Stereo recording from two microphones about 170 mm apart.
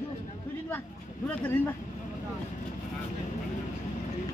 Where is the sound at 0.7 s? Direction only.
10° left (ahead or behind).